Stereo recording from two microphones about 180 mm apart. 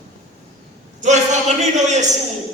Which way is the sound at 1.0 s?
40° right (ahead or behind).